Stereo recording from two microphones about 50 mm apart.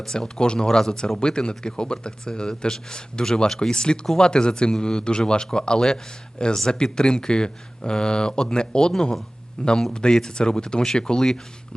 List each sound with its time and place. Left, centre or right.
0.0 s speech: centre